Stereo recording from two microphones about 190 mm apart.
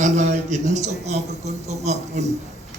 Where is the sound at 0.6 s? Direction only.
40° right (ahead or behind).